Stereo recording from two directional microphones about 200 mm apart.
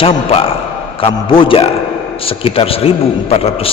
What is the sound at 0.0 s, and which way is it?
A man's voice, 30° left (ahead or behind).